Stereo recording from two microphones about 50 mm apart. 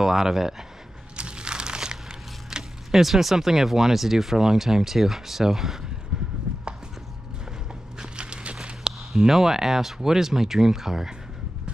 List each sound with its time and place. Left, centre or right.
0.0 s speech: centre
1.1 s crumpling: centre
2.5 s speech: centre
6.1 s a sound: centre
8.0 s a sound: centre
9.1 s speech: centre